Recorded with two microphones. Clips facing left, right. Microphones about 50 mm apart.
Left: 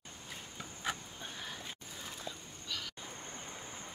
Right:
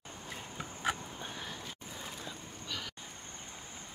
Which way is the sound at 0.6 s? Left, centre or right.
Centre.